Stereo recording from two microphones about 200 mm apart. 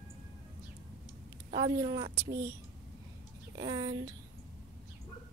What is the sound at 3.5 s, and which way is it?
Speech, 20° right (ahead or behind).